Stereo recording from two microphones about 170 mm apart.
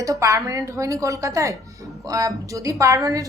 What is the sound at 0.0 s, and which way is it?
A woman's voice, 20° right (ahead or behind).